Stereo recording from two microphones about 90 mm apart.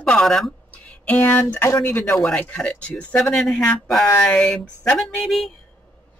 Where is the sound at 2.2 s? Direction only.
10° left (ahead or behind).